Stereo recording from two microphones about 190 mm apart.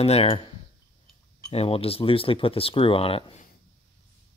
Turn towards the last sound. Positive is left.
turn(degrees=30)  # may be behind; listen again after turning